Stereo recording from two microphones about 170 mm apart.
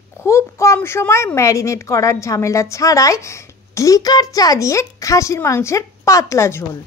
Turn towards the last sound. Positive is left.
turn(degrees=15)  # may be behind; listen again after turning